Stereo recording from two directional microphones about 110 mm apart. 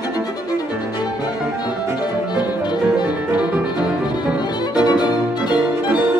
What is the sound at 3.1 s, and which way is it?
Music, 10° right (ahead or behind).